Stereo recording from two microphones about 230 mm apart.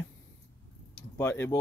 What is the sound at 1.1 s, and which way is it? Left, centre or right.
Speech, centre.